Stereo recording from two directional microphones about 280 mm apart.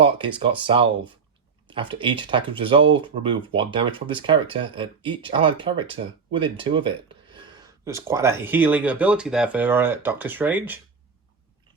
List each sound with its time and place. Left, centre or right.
0.0 s speech: centre